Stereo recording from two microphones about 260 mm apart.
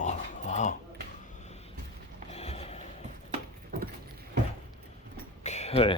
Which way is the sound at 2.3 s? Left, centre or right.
Left.